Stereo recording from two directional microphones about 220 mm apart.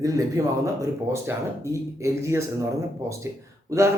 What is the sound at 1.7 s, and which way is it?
Speech, 15° right (ahead or behind).